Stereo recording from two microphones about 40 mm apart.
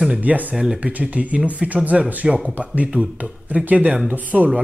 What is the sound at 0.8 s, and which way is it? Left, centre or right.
Speech, right.